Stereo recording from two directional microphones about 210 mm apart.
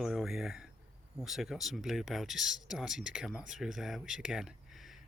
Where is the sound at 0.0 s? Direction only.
Centre (ahead or behind).